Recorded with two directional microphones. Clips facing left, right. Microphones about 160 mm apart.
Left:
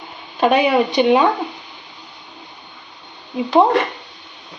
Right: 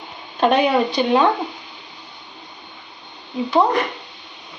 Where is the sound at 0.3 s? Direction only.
10° left (ahead or behind).